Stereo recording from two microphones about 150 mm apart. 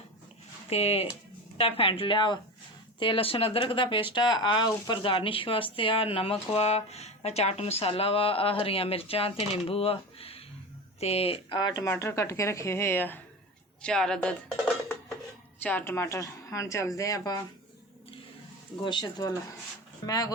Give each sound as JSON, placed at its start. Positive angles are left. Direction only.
{"t": 0.7, "sound": "speech", "side_deg": 45}
{"t": 11.9, "sound": "a woman's voice", "side_deg": 20}
{"t": 15.6, "sound": "a woman's voice", "side_deg": 15}
{"t": 18.8, "sound": "a woman's voice", "side_deg": 30}